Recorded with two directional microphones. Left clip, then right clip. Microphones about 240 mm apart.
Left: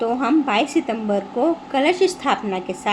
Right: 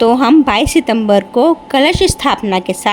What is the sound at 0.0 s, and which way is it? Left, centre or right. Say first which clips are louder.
A woman's voice: right 10 dB; right.